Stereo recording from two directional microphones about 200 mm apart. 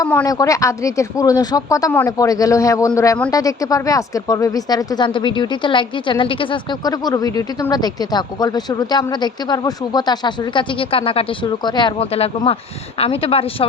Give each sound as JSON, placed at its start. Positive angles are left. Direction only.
{"t": 0.0, "sound": "speech", "side_deg": 10}